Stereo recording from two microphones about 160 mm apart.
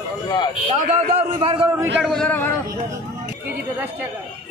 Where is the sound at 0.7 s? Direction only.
55° right (ahead or behind).